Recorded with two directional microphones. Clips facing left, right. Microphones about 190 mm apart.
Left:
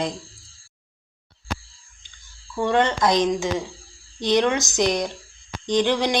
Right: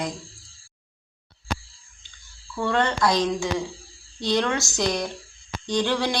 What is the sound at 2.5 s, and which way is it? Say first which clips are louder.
Speech: left 3 dB; 20° left (ahead or behind).